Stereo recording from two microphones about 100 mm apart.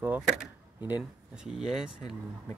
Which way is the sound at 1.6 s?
5° right (ahead or behind).